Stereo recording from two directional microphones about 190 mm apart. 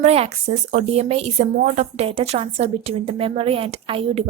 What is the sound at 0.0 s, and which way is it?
A woman's voice, 35° right (ahead or behind).